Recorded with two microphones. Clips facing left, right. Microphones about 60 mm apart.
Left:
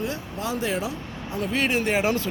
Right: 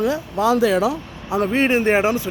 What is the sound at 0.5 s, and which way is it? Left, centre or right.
Speech, right.